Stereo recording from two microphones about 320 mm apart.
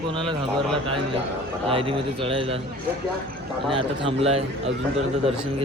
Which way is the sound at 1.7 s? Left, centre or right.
Centre.